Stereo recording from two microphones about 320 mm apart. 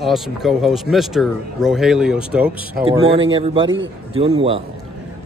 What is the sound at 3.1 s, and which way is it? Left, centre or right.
Speech, centre.